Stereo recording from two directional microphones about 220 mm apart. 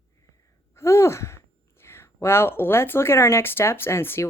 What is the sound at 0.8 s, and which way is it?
Speech, 10° left (ahead or behind).